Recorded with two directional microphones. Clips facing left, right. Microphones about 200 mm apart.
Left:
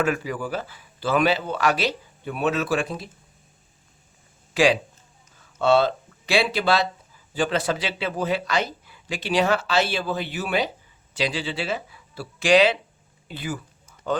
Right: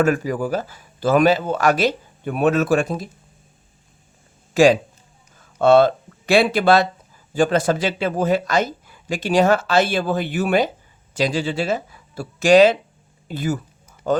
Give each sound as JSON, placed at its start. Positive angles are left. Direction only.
{"t": 0.0, "sound": "speech", "side_deg": -45}
{"t": 4.5, "sound": "speech", "side_deg": -45}